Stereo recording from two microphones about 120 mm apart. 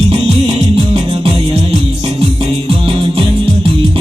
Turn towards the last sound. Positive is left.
turn(degrees=-50)  # may be behind; listen again after turning